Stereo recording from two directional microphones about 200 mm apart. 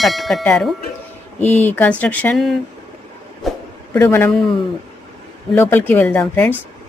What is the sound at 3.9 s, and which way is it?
Speech, 10° left (ahead or behind).